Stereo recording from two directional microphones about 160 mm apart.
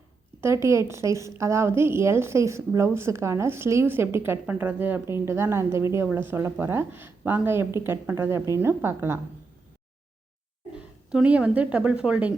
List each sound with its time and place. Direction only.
0.4 s a woman's voice: 15° right (ahead or behind)
11.1 s a woman's voice: 5° right (ahead or behind)